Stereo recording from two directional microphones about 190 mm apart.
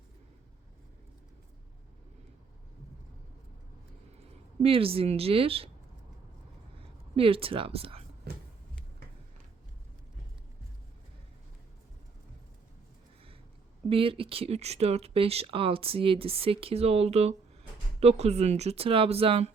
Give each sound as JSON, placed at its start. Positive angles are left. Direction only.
{"t": 4.6, "sound": "speech", "side_deg": -30}
{"t": 7.2, "sound": "speech", "side_deg": -30}
{"t": 13.9, "sound": "speech", "side_deg": -30}